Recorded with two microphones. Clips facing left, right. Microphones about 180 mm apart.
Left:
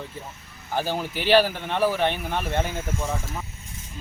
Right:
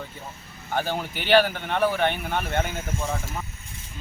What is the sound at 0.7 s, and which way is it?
A man's voice, centre (ahead or behind).